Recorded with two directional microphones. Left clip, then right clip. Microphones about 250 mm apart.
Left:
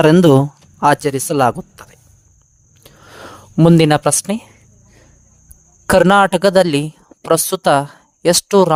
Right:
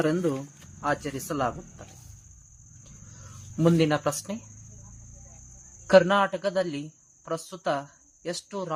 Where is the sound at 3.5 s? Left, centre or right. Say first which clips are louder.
Left 12 dB; left.